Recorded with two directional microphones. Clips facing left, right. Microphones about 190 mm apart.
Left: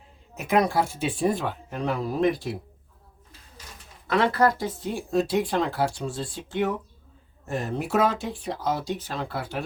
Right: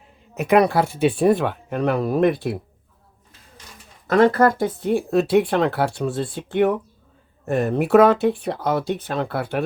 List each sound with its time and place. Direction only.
0.3 s speech: 65° right (ahead or behind)
4.0 s speech: 45° right (ahead or behind)